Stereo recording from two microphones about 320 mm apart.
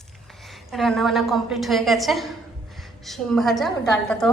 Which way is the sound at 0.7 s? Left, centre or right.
Centre.